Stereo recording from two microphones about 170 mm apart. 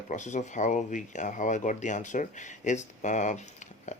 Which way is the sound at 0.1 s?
45° left (ahead or behind).